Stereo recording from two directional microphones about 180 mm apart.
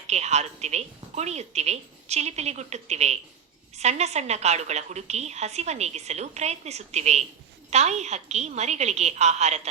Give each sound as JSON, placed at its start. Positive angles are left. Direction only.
{"t": 0.1, "sound": "a woman's voice", "side_deg": -40}